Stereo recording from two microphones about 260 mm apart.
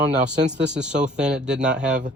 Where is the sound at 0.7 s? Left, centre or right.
Centre.